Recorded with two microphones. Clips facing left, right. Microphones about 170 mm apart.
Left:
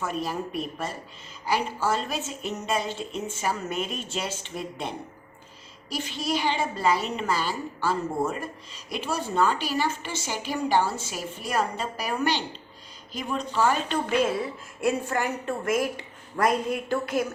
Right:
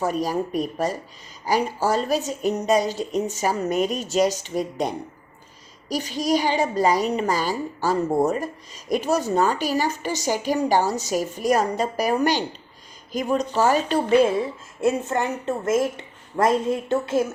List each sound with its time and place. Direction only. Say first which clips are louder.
0.0 s a woman's voice: right 6 dB; 40° right (ahead or behind)
14.8 s a woman's voice: right 4 dB; 20° right (ahead or behind)